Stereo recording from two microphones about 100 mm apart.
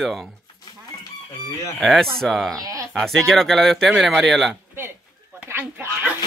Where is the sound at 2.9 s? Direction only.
5° left (ahead or behind).